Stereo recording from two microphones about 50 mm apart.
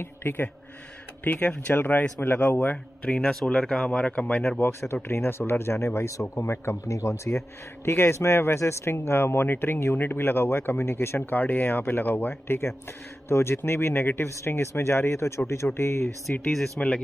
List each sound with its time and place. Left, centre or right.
0.0 s speech: left
1.3 s speech: left
3.1 s speech: centre
4.6 s a man's voice: left
6.4 s a man's voice: left
11.1 s speech: left
14.2 s speech: left
14.5 s a man's voice: left
16.5 s speech: centre